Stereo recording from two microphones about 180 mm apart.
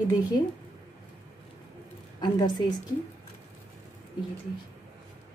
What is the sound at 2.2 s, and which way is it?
Speech, 25° left (ahead or behind).